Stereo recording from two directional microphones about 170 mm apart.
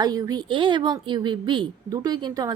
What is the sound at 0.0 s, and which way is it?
A woman's voice, 20° right (ahead or behind).